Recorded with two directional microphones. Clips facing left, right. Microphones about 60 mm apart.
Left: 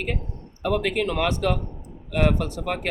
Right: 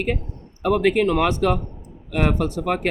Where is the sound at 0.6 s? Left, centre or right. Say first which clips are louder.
Right 5 dB; right.